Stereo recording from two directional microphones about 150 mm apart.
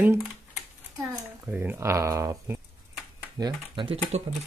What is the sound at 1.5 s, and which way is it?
Speech, 15° right (ahead or behind).